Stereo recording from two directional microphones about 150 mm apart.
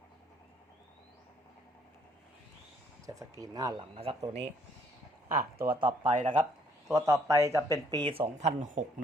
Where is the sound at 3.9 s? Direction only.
40° right (ahead or behind).